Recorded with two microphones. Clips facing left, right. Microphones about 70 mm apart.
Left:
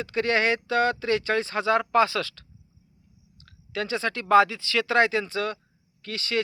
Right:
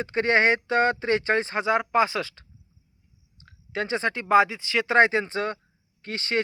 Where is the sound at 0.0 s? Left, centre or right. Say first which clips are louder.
Right 2 dB; right.